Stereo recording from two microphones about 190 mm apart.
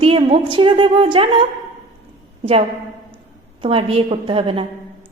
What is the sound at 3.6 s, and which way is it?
A woman's voice, 30° right (ahead or behind).